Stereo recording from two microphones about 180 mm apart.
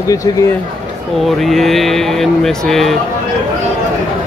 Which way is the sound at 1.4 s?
Centre (ahead or behind).